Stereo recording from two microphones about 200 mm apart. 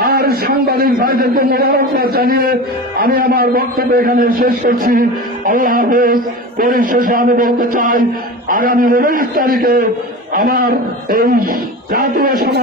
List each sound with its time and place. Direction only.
0.0 s a man's voice: 50° right (ahead or behind)